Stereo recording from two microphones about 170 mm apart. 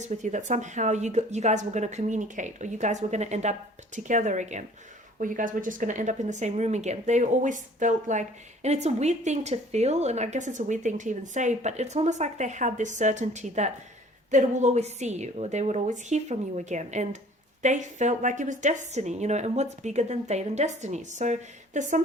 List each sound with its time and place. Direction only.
0.0 s speech: 45° right (ahead or behind)